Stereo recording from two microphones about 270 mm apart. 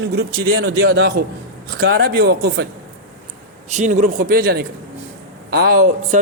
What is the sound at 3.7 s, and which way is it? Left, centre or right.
A man's voice, right.